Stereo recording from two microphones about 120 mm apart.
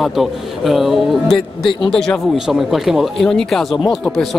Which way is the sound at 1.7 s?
45° left (ahead or behind).